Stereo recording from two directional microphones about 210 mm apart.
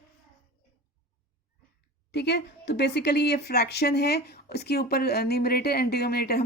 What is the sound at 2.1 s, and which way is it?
Speech, 50° left (ahead or behind).